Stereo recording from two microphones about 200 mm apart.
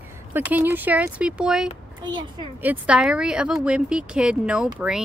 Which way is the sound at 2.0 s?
20° right (ahead or behind).